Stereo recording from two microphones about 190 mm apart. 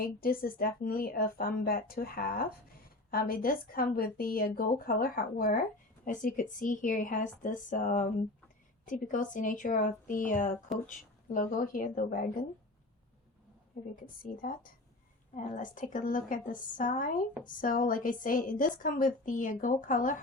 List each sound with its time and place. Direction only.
0.0 s a woman's voice: 50° left (ahead or behind)
14.2 s a woman's voice: 45° left (ahead or behind)